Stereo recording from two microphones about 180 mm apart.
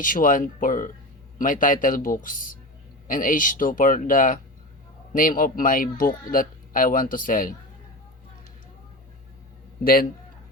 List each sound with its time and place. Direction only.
0.0 s speech: 50° left (ahead or behind)
9.8 s a man's voice: 55° left (ahead or behind)